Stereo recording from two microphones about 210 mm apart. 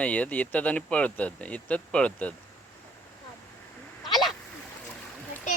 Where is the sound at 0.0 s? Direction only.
5° left (ahead or behind).